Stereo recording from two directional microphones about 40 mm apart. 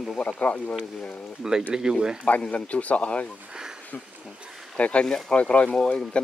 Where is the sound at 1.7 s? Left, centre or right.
Centre.